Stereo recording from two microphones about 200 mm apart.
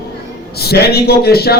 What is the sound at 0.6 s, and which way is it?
Speech, 50° left (ahead or behind).